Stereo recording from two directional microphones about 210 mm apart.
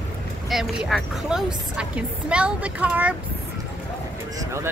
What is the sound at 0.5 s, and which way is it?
A woman's voice, centre (ahead or behind).